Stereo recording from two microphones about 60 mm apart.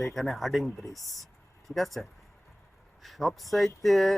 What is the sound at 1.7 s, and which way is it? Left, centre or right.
Speech, centre.